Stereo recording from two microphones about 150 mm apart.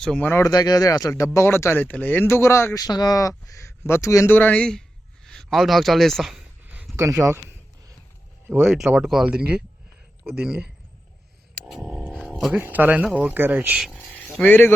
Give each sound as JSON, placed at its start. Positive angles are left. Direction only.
{"t": 0.0, "sound": "speech", "side_deg": 5}
{"t": 0.4, "sound": "speech", "side_deg": 25}
{"t": 5.2, "sound": "a sound", "side_deg": 5}
{"t": 6.9, "sound": "speech", "side_deg": -20}
{"t": 8.7, "sound": "speech", "side_deg": -5}
{"t": 11.7, "sound": "music", "side_deg": -10}
{"t": 12.5, "sound": "speech", "side_deg": -10}
{"t": 13.9, "sound": "a sound", "side_deg": 10}